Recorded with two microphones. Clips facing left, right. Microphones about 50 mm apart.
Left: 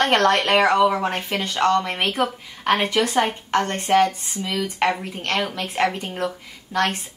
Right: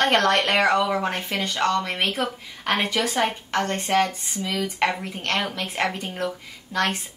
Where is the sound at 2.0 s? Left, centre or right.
Centre.